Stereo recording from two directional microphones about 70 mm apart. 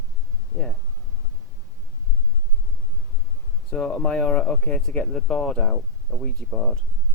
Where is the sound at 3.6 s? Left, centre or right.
Centre.